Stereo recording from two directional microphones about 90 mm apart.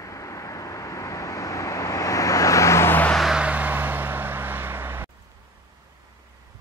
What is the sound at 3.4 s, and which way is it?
Vehicle, 15° right (ahead or behind).